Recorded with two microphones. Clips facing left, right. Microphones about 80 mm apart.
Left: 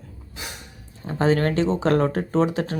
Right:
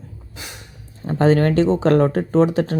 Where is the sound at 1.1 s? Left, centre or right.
Right.